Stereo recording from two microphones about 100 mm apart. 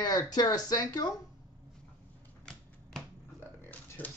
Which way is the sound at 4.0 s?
20° left (ahead or behind).